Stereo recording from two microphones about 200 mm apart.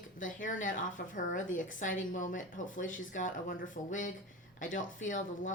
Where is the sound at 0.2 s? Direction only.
40° left (ahead or behind).